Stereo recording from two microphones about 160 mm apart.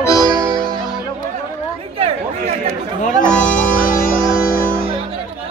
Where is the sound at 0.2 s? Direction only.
25° right (ahead or behind).